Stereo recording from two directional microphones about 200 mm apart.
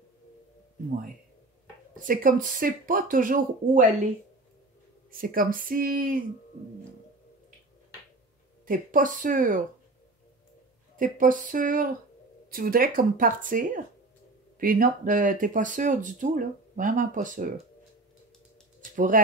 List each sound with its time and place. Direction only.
2.0 s speech: 45° right (ahead or behind)
5.1 s speech: 45° right (ahead or behind)
8.6 s speech: 45° right (ahead or behind)
11.0 s speech: 40° right (ahead or behind)
18.9 s speech: 40° right (ahead or behind)